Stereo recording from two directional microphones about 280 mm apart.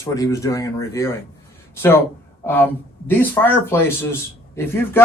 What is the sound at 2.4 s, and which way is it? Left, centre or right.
Speech, centre.